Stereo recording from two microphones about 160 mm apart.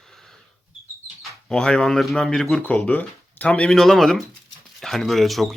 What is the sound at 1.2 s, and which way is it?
Speech, 5° left (ahead or behind).